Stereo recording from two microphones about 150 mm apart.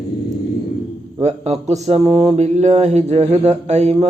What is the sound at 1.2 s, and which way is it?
Speech, 45° right (ahead or behind).